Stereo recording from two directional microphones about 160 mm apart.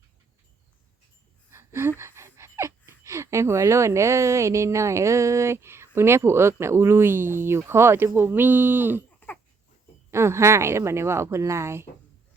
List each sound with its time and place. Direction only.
1.5 s speech: 15° right (ahead or behind)
10.1 s speech: 15° right (ahead or behind)